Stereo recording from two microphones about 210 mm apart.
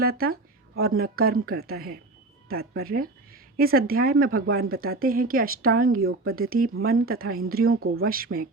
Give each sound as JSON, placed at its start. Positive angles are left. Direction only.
{"t": 0.0, "sound": "speech", "side_deg": -45}
{"t": 7.6, "sound": "speech", "side_deg": -90}
{"t": 8.0, "sound": "speech", "side_deg": -45}